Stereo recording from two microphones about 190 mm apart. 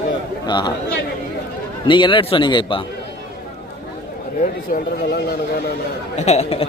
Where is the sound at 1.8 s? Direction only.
25° left (ahead or behind).